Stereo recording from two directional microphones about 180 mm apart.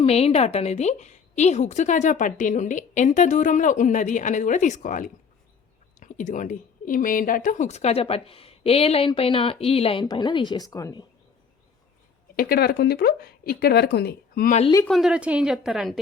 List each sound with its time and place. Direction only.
0.0 s a woman's voice: 35° left (ahead or behind)
12.4 s speech: 60° left (ahead or behind)
14.8 s a woman's voice: centre (ahead or behind)